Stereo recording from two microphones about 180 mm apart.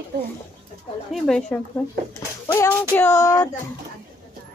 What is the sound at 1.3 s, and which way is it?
Speech, 5° left (ahead or behind).